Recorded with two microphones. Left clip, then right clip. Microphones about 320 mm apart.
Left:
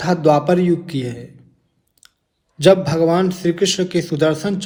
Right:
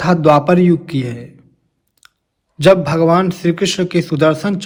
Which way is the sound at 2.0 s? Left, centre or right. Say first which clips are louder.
Right 3 dB; right.